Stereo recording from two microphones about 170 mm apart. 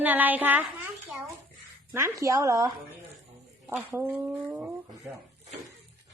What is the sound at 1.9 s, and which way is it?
A woman's voice, 15° right (ahead or behind).